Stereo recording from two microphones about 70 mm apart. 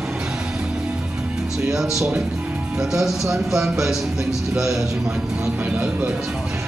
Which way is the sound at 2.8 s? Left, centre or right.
Centre.